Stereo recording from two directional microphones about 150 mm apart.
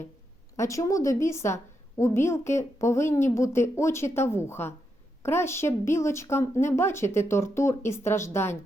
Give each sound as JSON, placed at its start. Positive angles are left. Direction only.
{"t": 0.5, "sound": "a woman's voice", "side_deg": 20}